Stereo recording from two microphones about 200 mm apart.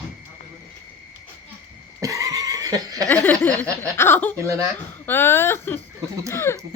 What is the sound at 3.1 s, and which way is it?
Speech, 5° left (ahead or behind).